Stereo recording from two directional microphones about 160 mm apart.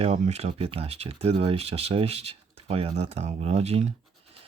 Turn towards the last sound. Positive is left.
turn(degrees=-40)  # may be behind; listen again after turning